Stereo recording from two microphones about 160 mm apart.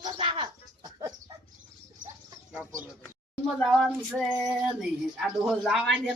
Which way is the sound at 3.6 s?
Centre (ahead or behind).